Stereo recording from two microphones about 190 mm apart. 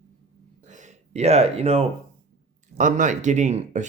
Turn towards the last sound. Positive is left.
turn(degrees=-40)  # may be behind; listen again after turning